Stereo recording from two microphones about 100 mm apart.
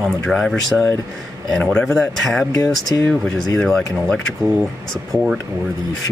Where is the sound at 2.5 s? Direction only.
40° left (ahead or behind).